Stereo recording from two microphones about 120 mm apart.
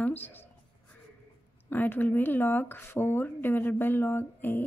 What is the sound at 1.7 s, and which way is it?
Speech, 15° left (ahead or behind).